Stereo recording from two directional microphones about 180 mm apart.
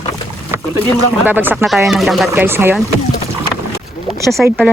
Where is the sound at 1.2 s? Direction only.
10° right (ahead or behind).